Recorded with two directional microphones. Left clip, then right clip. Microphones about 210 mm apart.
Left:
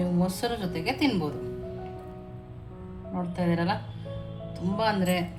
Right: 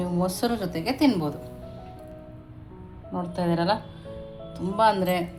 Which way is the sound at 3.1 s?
30° right (ahead or behind).